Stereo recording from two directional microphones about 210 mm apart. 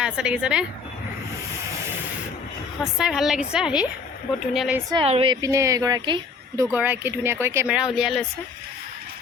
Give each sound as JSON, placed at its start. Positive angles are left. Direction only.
{"t": 0.0, "sound": "a woman's voice", "side_deg": -5}
{"t": 2.8, "sound": "a woman's voice", "side_deg": 0}
{"t": 4.9, "sound": "a woman's voice", "side_deg": -25}
{"t": 6.7, "sound": "a woman's voice", "side_deg": -10}